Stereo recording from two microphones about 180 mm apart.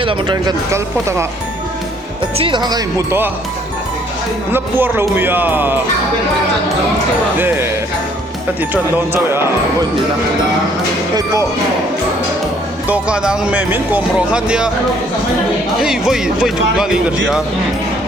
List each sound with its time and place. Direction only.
0.0 s speech: 25° right (ahead or behind)
0.7 s speech: 15° right (ahead or behind)
2.4 s speech: 25° right (ahead or behind)
4.5 s speech: 10° right (ahead or behind)
7.3 s speech: 10° right (ahead or behind)
8.7 s speech: 10° right (ahead or behind)
11.1 s speech: 20° right (ahead or behind)
12.9 s speech: 5° right (ahead or behind)
15.8 s speech: 5° right (ahead or behind)